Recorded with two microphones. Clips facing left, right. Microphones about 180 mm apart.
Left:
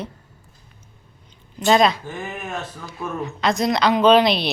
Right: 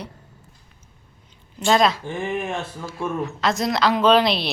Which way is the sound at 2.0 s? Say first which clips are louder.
Right 5 dB; 25° right (ahead or behind).